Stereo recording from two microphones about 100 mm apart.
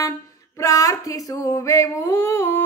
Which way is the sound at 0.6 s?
35° left (ahead or behind).